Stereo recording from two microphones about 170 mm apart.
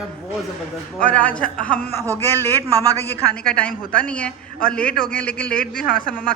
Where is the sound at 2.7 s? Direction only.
20° right (ahead or behind).